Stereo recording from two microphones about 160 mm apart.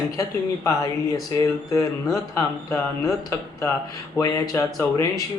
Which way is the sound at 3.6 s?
20° left (ahead or behind).